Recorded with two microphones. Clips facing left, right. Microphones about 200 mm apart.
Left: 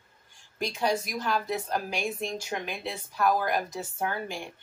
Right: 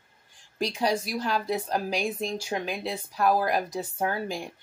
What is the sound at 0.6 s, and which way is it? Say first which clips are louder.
A woman's voice: right 2 dB; 35° right (ahead or behind).